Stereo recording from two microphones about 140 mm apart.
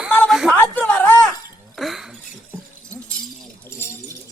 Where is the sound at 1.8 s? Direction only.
Centre (ahead or behind).